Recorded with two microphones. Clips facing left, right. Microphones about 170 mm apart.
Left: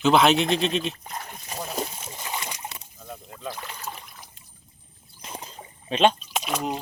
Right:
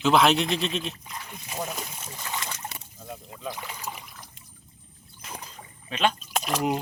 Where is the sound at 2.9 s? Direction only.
5° right (ahead or behind).